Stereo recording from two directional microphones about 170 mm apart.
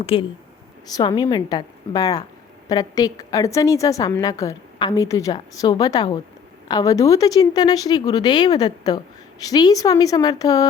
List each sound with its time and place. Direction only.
0.0 s a woman's voice: 35° left (ahead or behind)